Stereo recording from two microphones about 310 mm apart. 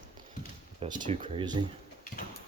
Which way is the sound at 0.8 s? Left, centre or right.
Centre.